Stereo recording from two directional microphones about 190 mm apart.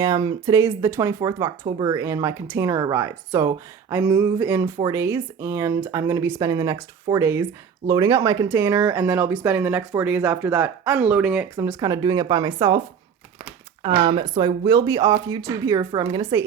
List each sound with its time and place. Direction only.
0.0 s speech: 20° right (ahead or behind)
11.5 s speech: 20° right (ahead or behind)
13.8 s speech: 25° right (ahead or behind)